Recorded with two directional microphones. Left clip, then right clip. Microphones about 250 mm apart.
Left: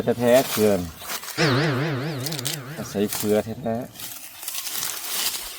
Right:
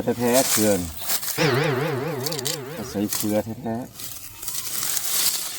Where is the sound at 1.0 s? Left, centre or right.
Right.